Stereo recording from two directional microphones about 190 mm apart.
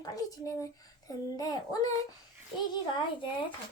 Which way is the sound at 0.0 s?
20° left (ahead or behind).